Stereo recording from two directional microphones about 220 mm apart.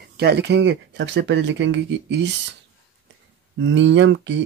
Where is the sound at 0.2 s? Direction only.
50° right (ahead or behind).